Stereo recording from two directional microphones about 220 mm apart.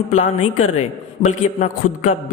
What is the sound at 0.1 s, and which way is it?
A man's voice, 35° left (ahead or behind).